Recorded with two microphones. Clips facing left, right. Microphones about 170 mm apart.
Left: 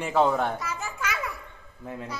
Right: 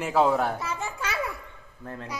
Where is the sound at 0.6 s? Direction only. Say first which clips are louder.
Right 1 dB; 30° right (ahead or behind).